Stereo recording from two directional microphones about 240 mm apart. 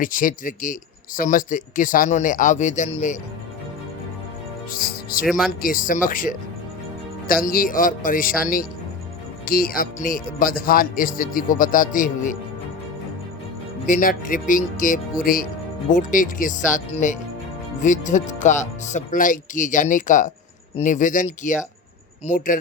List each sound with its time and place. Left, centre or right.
0.0 s speech: left
4.7 s speech: left
5.2 s speech: centre
5.6 s speech: left
13.8 s speech: left